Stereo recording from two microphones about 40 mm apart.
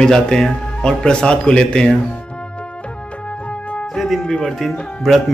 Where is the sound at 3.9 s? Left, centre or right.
Centre.